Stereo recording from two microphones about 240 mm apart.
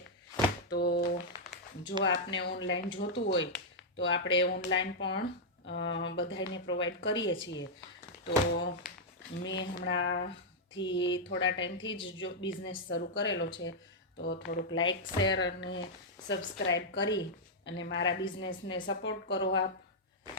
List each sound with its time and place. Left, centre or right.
0.7 s a woman's voice: left
2.0 s a woman's voice: left
14.8 s speech: centre
15.4 s a woman's voice: left